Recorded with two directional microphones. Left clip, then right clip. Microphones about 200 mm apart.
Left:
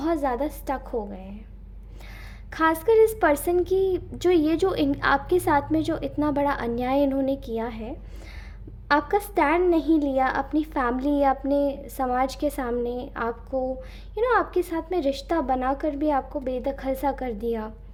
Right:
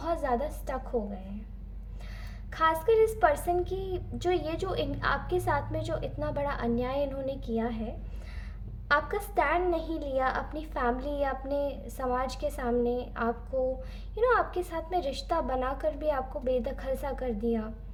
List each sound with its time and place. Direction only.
0.0 s a woman's voice: 35° left (ahead or behind)
2.5 s a woman's voice: 40° left (ahead or behind)
8.9 s a woman's voice: 35° left (ahead or behind)